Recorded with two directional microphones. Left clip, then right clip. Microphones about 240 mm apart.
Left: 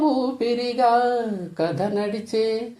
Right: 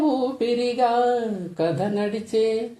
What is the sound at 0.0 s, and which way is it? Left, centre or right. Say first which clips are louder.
Speech: left 1 dB; left.